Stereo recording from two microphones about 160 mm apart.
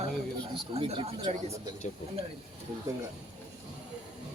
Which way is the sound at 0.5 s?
35° right (ahead or behind).